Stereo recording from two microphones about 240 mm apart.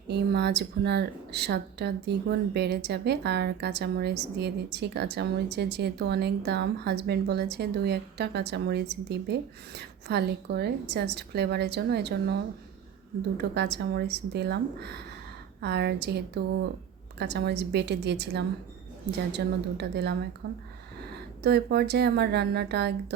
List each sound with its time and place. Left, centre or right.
0.1 s speech: right